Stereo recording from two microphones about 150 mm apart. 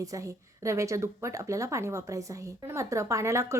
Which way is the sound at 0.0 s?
20° right (ahead or behind).